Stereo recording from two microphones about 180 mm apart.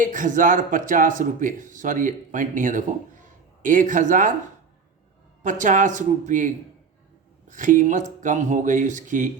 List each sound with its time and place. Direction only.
0.0 s speech: 45° right (ahead or behind)
5.4 s speech: 45° right (ahead or behind)